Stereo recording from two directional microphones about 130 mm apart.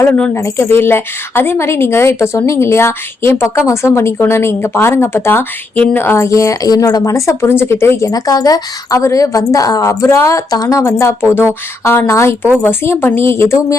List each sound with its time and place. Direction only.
0.0 s a woman's voice: 15° left (ahead or behind)